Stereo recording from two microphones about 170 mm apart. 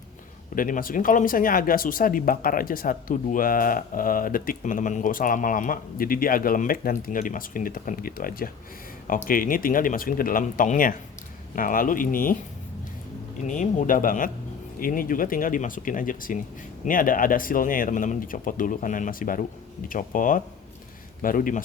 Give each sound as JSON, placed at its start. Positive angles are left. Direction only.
{"t": 0.5, "sound": "speech", "side_deg": 55}
{"t": 13.5, "sound": "speech", "side_deg": 45}